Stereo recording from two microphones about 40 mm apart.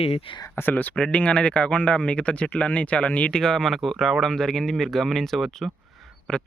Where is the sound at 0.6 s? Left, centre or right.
Left.